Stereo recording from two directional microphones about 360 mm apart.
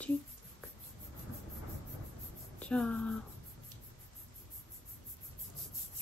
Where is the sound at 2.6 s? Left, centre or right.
Centre.